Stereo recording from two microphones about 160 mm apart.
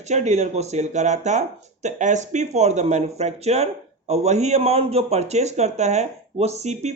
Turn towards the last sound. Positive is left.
turn(degrees=-45)  # may be behind; listen again after turning